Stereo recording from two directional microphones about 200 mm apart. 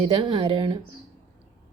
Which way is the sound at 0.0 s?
25° right (ahead or behind).